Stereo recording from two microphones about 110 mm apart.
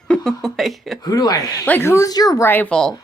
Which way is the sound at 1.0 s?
35° left (ahead or behind).